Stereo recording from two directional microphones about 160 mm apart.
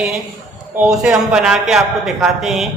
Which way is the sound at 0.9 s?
5° right (ahead or behind).